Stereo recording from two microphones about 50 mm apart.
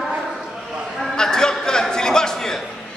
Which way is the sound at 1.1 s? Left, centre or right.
Centre.